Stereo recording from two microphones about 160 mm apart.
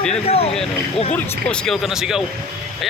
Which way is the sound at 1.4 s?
5° left (ahead or behind).